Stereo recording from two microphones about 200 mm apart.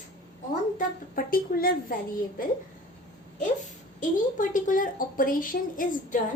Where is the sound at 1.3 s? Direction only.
45° left (ahead or behind).